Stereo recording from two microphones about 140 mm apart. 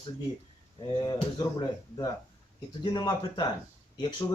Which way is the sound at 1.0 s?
30° left (ahead or behind).